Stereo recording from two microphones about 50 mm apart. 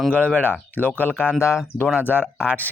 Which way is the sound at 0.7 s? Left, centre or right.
Left.